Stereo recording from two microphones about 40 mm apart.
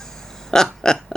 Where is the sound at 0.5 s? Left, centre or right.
Centre.